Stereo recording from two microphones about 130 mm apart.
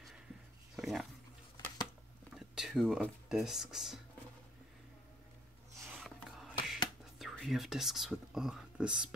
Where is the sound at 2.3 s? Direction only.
5° right (ahead or behind).